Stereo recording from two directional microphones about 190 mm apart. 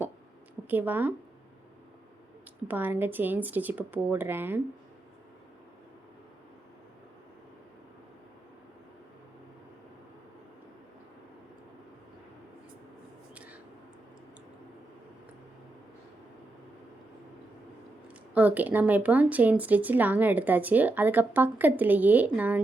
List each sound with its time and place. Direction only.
0.7 s speech: 10° right (ahead or behind)
2.6 s speech: 10° right (ahead or behind)
13.3 s a sound: 5° right (ahead or behind)
18.3 s speech: 10° right (ahead or behind)